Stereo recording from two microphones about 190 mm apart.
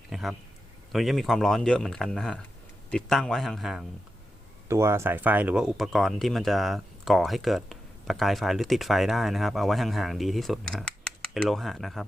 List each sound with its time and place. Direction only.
0.1 s a sound: centre (ahead or behind)
0.9 s speech: centre (ahead or behind)
4.7 s speech: 15° right (ahead or behind)